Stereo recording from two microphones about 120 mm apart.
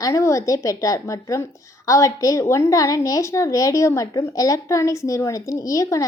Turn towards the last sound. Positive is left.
turn(degrees=25)  # may be behind; listen again after turning